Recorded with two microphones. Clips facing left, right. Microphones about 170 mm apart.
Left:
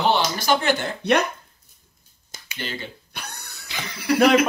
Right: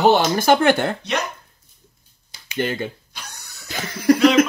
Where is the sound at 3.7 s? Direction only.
45° right (ahead or behind).